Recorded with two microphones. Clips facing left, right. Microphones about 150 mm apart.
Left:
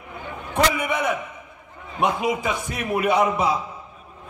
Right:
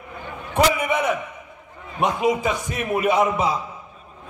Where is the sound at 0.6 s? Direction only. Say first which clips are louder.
Right 2 dB; 5° right (ahead or behind).